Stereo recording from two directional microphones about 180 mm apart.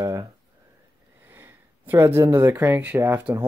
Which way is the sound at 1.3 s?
10° right (ahead or behind).